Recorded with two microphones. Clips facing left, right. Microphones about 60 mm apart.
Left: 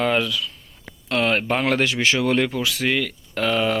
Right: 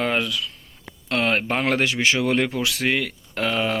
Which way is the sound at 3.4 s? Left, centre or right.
Centre.